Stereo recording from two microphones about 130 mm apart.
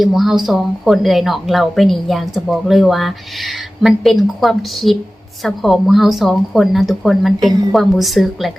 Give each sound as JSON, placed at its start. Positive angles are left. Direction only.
{"t": 0.0, "sound": "a woman's voice", "side_deg": -5}